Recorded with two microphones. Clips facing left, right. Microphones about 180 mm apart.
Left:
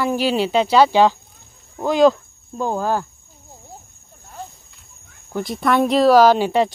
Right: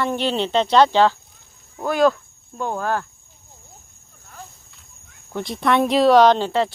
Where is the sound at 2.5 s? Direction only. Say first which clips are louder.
Left 3 dB; 30° left (ahead or behind).